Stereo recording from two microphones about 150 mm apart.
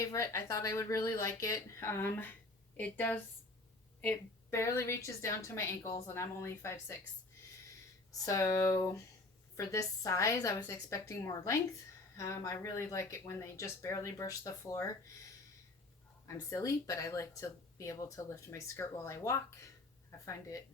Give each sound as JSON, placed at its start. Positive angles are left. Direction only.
{"t": 0.0, "sound": "speech", "side_deg": 20}
{"t": 4.5, "sound": "speech", "side_deg": 20}
{"t": 8.2, "sound": "speech", "side_deg": 20}
{"t": 16.2, "sound": "speech", "side_deg": 20}